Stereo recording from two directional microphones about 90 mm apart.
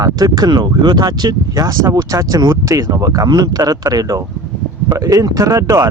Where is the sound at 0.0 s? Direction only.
45° right (ahead or behind).